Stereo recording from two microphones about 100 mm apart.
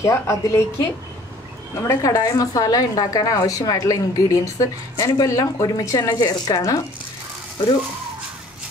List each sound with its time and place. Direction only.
0.0 s a woman's voice: 30° left (ahead or behind)